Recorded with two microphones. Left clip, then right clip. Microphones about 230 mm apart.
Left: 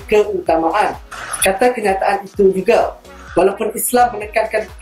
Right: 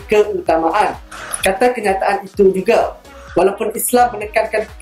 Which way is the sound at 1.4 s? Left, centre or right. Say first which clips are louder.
Even; right.